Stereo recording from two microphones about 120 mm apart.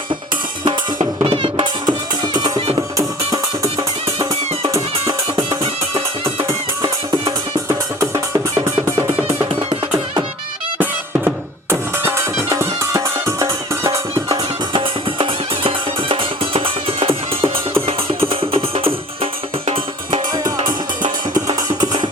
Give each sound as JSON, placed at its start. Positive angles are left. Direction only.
{"t": 1.2, "sound": "music", "side_deg": -45}
{"t": 12.5, "sound": "music", "side_deg": -25}
{"t": 14.7, "sound": "music", "side_deg": -45}
{"t": 21.0, "sound": "music", "side_deg": -40}